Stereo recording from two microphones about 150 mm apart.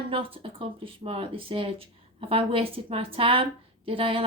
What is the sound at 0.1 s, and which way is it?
A woman's voice, 35° right (ahead or behind).